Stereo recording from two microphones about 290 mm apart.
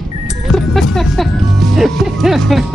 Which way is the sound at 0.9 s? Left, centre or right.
Centre.